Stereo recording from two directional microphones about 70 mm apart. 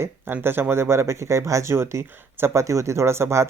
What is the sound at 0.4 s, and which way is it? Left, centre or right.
Speech, right.